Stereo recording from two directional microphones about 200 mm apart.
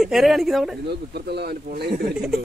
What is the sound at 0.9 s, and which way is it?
Speech, 55° right (ahead or behind).